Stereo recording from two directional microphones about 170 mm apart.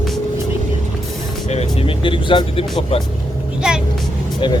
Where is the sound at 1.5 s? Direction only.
35° left (ahead or behind).